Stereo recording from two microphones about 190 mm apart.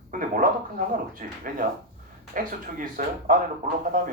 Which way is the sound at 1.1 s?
45° right (ahead or behind).